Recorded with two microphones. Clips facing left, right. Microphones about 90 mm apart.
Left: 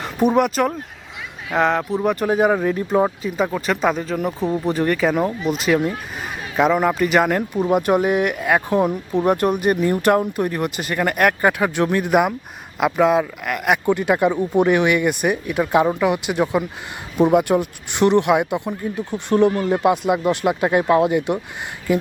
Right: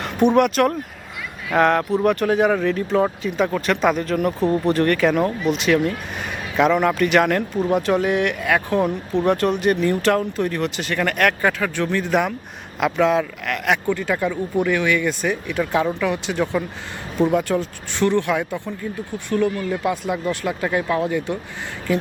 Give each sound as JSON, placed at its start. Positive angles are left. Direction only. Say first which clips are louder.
{"t": 0.0, "sound": "speech", "louder": "right 1 dB", "side_deg": 0}
{"t": 3.2, "sound": "speech", "louder": "right 1 dB", "side_deg": 0}
{"t": 6.6, "sound": "speech", "louder": "even", "side_deg": 5}